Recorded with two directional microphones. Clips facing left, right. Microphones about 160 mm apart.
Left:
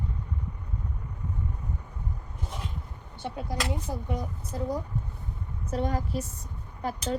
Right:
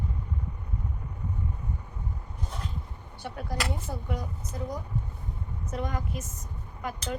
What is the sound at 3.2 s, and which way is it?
A woman's voice, 25° left (ahead or behind).